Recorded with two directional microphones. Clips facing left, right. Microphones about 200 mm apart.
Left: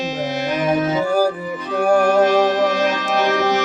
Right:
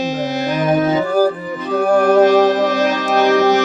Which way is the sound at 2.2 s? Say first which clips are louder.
Right 3 dB; 40° right (ahead or behind).